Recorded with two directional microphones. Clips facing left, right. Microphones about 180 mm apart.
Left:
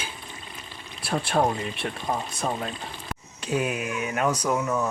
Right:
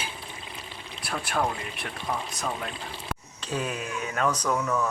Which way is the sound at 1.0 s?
30° left (ahead or behind).